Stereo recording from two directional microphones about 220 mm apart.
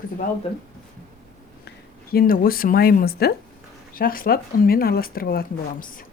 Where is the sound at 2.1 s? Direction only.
40° left (ahead or behind).